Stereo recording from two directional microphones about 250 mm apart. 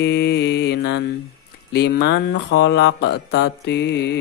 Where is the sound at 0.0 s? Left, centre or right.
Left.